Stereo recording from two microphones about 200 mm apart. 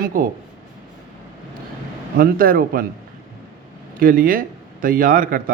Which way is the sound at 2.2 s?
45° right (ahead or behind).